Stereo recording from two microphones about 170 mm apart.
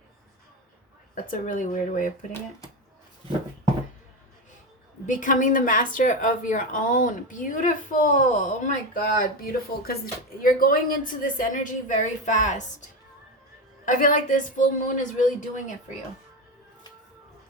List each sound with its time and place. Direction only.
1.1 s a woman's voice: 50° left (ahead or behind)
5.0 s a woman's voice: 50° left (ahead or behind)
13.8 s a woman's voice: 50° left (ahead or behind)